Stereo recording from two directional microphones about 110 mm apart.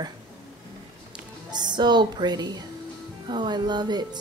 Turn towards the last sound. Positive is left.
turn(degrees=-40)  # may be behind; listen again after turning